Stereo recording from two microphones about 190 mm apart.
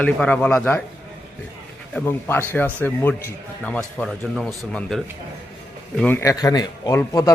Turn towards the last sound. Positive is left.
turn(degrees=15)  # may be behind; listen again after turning